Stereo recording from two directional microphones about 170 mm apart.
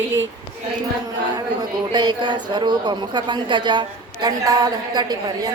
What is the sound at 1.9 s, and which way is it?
A woman's voice, 25° right (ahead or behind).